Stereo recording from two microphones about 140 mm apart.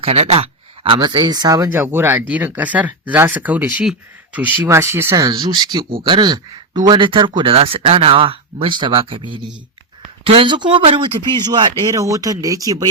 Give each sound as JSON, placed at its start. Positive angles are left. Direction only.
{"t": 0.0, "sound": "a sound", "side_deg": -50}
{"t": 0.9, "sound": "speech", "side_deg": -35}
{"t": 1.7, "sound": "speech", "side_deg": -15}
{"t": 11.3, "sound": "speech", "side_deg": -30}